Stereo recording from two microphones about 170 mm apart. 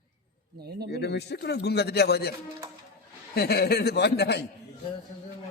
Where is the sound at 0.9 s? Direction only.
80° left.